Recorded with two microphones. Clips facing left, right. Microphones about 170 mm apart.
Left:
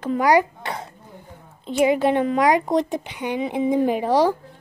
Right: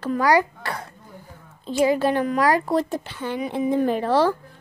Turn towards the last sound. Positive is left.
turn(degrees=15)  # may be behind; listen again after turning